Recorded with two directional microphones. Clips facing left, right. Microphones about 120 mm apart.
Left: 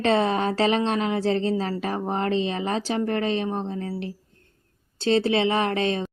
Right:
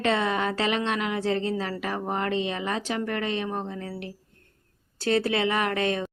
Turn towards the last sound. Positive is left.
turn(degrees=30)  # may be behind; listen again after turning